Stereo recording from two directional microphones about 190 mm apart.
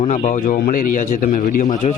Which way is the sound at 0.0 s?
35° left (ahead or behind).